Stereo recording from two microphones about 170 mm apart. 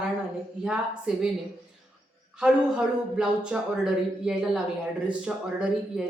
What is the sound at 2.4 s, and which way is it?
Speech, 5° right (ahead or behind).